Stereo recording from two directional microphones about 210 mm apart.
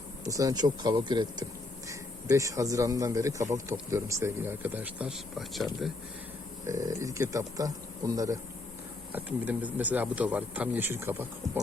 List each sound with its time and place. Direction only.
0.3 s speech: 15° right (ahead or behind)
6.7 s speech: 15° right (ahead or behind)